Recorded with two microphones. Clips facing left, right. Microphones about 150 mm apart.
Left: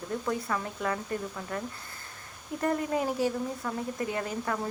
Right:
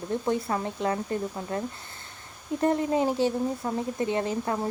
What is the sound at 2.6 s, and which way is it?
Speech, 25° right (ahead or behind).